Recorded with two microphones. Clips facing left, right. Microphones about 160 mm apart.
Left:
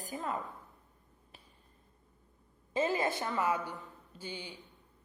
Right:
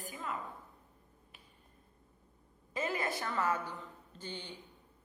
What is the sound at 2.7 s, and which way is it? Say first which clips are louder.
Speech: left 5 dB; 25° left (ahead or behind).